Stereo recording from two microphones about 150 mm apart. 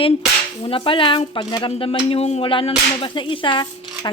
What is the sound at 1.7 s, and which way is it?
Speech, 40° left (ahead or behind).